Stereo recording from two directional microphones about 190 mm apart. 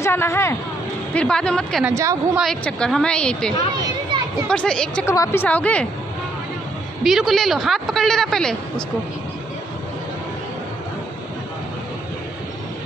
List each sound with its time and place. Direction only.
0.0 s speech: 15° left (ahead or behind)
1.9 s a woman's voice: 15° right (ahead or behind)
2.3 s speech: centre (ahead or behind)
5.1 s a woman's voice: 15° left (ahead or behind)
7.0 s speech: centre (ahead or behind)